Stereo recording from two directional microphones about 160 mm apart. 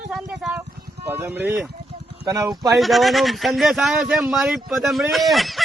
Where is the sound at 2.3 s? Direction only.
20° right (ahead or behind).